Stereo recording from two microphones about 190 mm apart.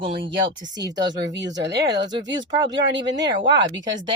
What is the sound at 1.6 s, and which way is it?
Speech, 60° right (ahead or behind).